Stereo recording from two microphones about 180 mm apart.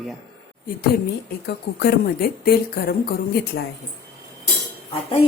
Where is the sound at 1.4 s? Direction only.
65° left (ahead or behind).